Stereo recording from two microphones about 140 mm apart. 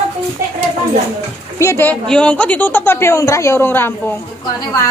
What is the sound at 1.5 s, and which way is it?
Speech, 15° left (ahead or behind).